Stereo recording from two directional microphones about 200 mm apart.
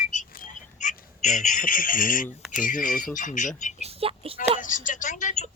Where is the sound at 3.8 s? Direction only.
30° right (ahead or behind).